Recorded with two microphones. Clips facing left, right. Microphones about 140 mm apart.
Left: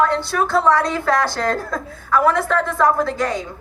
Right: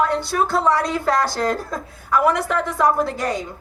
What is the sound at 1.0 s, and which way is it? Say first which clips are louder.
A woman's voice: left 1 dB; 20° right (ahead or behind).